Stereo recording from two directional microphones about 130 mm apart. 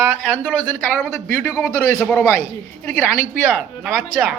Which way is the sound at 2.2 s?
20° left (ahead or behind).